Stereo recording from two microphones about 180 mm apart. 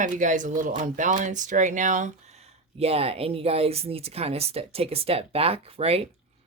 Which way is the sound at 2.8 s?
35° right (ahead or behind).